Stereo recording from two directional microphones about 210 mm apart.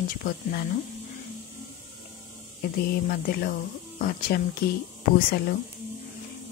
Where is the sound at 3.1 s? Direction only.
45° left (ahead or behind).